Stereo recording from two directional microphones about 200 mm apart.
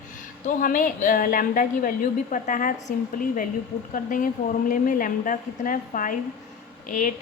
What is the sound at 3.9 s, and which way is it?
A woman's voice, 45° left (ahead or behind).